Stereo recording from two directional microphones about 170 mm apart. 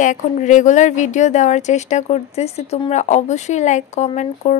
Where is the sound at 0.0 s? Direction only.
45° left (ahead or behind).